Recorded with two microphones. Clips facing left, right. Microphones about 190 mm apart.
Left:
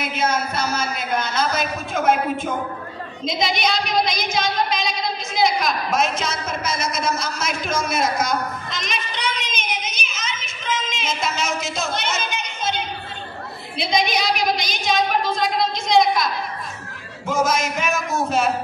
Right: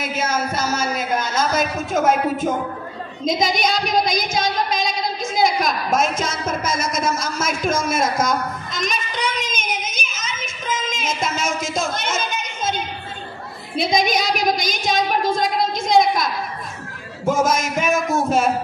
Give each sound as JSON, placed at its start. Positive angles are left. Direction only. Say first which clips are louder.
{"t": 0.2, "sound": "a woman's voice", "louder": "even", "side_deg": -45}
{"t": 3.3, "sound": "child singing", "louder": "right 3 dB", "side_deg": -45}
{"t": 13.7, "sound": "a woman's voice", "louder": "right 3 dB", "side_deg": -45}
{"t": 17.3, "sound": "a woman's voice", "louder": "right 2 dB", "side_deg": -45}